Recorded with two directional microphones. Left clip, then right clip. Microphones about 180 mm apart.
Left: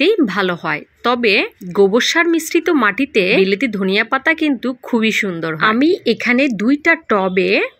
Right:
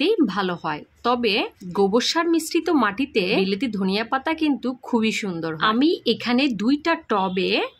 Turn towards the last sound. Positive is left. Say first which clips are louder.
# left 7 dB
turn(degrees=15)  # may be behind; listen again after turning